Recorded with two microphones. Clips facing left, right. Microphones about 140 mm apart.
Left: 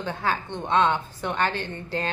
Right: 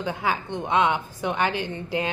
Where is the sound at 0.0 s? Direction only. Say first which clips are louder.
Right 1 dB; 10° right (ahead or behind).